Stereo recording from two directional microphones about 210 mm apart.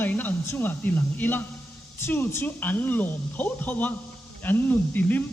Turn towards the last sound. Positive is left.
turn(degrees=10)  # may be behind; listen again after turning